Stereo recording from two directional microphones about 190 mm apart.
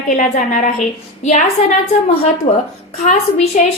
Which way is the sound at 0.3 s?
40° left (ahead or behind).